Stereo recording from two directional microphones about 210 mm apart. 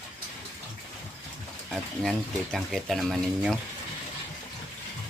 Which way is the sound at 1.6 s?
Centre (ahead or behind).